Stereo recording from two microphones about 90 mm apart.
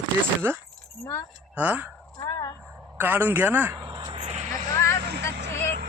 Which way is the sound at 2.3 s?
40° left (ahead or behind).